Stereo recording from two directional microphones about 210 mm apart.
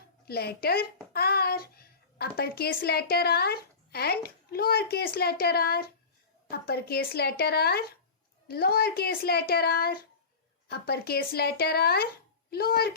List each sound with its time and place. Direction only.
0.3 s a child's voice: 50° left (ahead or behind)